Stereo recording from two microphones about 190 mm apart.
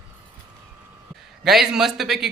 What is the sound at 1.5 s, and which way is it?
Speech, centre (ahead or behind).